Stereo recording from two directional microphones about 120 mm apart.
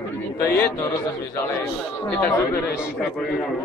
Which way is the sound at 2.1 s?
15° left (ahead or behind).